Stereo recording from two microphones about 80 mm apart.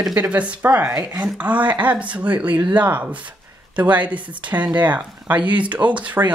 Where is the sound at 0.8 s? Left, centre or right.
Right.